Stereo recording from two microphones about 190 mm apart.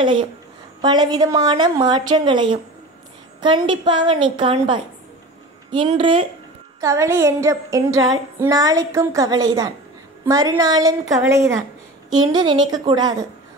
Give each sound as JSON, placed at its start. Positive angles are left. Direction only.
{"t": 0.0, "sound": "a woman's voice", "side_deg": -25}
{"t": 6.8, "sound": "female singing", "side_deg": -15}
{"t": 10.2, "sound": "a woman's voice", "side_deg": -20}